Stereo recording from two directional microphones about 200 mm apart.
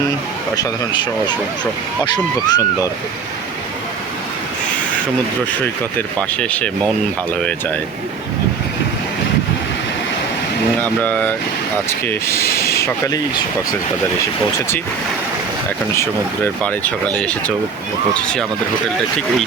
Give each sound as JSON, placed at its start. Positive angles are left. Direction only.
{"t": 0.5, "sound": "speech", "side_deg": 20}
{"t": 6.4, "sound": "speech", "side_deg": 5}
{"t": 10.8, "sound": "speech", "side_deg": 10}
{"t": 12.5, "sound": "a sound", "side_deg": 15}
{"t": 16.0, "sound": "speech", "side_deg": 10}